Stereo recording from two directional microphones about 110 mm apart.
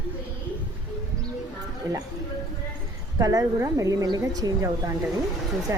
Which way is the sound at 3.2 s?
35° right (ahead or behind).